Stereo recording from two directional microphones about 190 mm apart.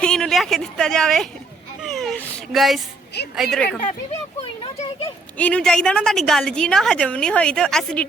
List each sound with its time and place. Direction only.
0.0 s a woman's voice: 5° left (ahead or behind)
5.0 s a woman's voice: 5° left (ahead or behind)